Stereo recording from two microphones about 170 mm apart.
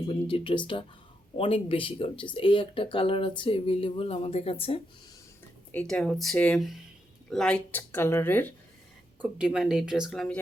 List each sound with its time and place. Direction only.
0.1 s speech: 30° left (ahead or behind)
5.7 s speech: 5° left (ahead or behind)
9.4 s speech: 5° right (ahead or behind)